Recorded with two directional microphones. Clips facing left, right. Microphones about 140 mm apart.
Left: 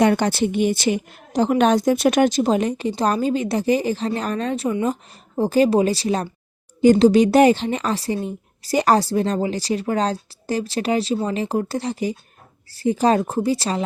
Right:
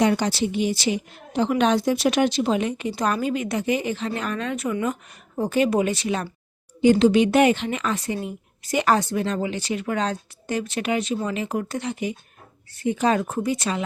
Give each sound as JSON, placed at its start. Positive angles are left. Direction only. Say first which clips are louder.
{"t": 0.0, "sound": "a woman's voice", "louder": "left 3 dB", "side_deg": 55}